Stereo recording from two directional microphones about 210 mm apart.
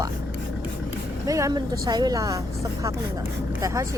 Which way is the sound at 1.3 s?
15° right (ahead or behind).